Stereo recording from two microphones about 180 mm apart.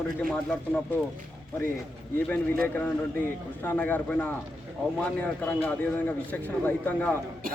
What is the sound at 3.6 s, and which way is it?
A man's voice, 10° left (ahead or behind).